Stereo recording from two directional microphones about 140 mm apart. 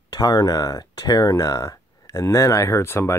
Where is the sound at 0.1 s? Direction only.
25° left (ahead or behind).